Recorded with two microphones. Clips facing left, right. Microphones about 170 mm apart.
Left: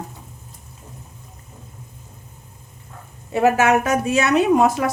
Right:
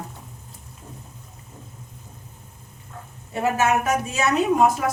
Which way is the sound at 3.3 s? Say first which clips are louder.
Left 5 dB; 80° left.